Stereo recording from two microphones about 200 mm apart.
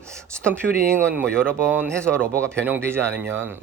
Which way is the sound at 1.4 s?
10° right (ahead or behind).